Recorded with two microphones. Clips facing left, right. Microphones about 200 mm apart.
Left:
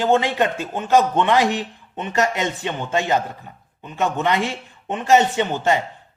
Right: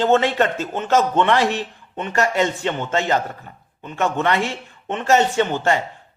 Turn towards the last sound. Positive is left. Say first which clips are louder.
# right 1 dB
turn(degrees=15)  # may be behind; listen again after turning